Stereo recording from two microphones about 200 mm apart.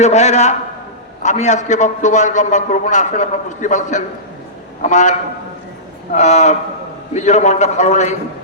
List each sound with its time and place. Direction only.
0.0 s a man's voice: 35° left (ahead or behind)
6.1 s a man's voice: 35° left (ahead or behind)